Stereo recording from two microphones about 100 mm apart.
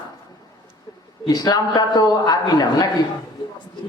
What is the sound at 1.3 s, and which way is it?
A man's voice, 40° left (ahead or behind).